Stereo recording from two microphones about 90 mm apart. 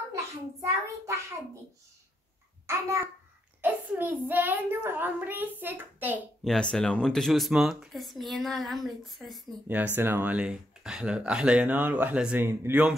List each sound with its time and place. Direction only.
0.1 s a child's voice: 35° right (ahead or behind)
2.6 s a child's voice: 30° right (ahead or behind)
3.6 s a child's voice: 20° right (ahead or behind)
6.4 s speech: 10° left (ahead or behind)
9.9 s speech: 20° right (ahead or behind)
12.4 s a child's voice: 25° right (ahead or behind)